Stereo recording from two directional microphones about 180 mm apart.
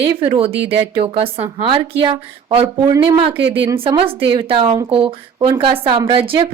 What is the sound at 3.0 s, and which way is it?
Speech, 30° right (ahead or behind).